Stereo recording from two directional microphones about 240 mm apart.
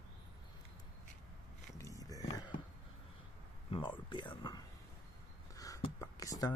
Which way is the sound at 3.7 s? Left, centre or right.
Centre.